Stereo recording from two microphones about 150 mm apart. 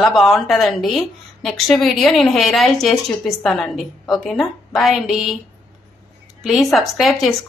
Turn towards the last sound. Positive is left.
turn(degrees=0)  # may be behind; listen again after turning